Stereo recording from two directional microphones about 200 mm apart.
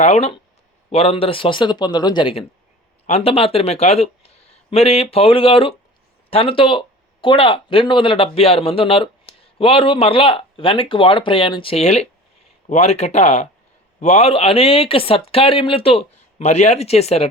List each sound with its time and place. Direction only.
0.0 s speech: 30° left (ahead or behind)